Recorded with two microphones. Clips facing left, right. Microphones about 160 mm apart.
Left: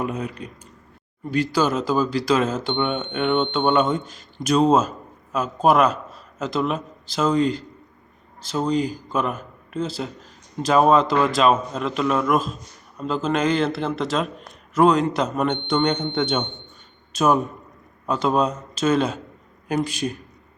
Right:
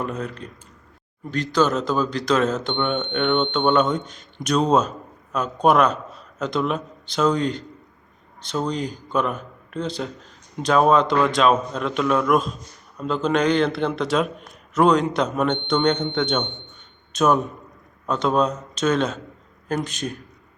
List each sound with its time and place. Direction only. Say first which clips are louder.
0.0 s a man's voice: left 1 dB; 10° left (ahead or behind)